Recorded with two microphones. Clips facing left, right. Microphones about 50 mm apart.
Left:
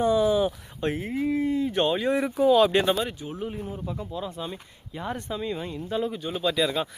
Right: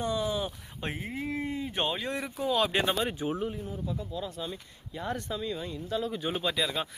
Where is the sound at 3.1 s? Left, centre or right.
Right.